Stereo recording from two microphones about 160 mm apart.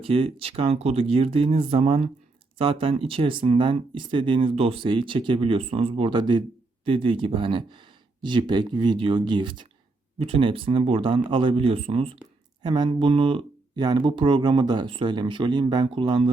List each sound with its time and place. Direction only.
0.0 s speech: 35° right (ahead or behind)